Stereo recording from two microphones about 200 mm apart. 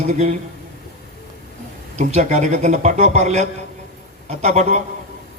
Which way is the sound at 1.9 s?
35° right (ahead or behind).